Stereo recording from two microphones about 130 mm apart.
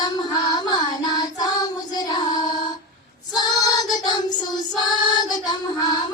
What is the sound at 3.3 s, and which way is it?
Child singing, 30° left (ahead or behind).